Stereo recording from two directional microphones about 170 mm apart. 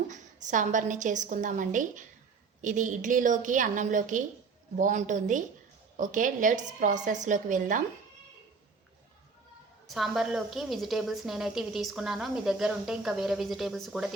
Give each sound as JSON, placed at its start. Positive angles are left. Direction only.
{"t": 0.1, "sound": "a woman's voice", "side_deg": -45}
{"t": 9.8, "sound": "a woman's voice", "side_deg": 0}